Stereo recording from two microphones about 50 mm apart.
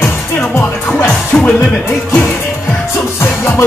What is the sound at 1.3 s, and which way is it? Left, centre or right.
Music, left.